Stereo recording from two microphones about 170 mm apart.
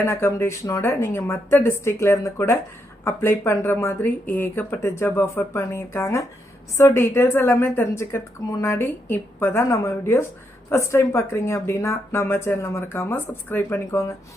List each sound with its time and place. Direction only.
0.0 s a woman's voice: 15° left (ahead or behind)